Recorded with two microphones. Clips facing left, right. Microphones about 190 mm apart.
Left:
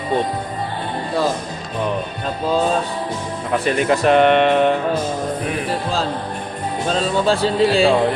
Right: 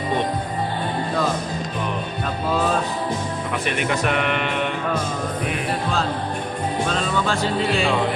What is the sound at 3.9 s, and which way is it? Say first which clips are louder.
Speech: left 11 dB; 30° left (ahead or behind).